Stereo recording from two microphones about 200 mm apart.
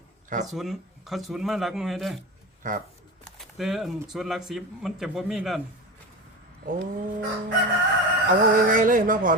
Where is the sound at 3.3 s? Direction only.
Centre (ahead or behind).